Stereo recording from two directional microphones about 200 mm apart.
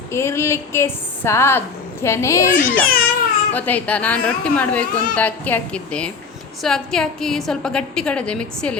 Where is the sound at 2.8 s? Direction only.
50° left (ahead or behind).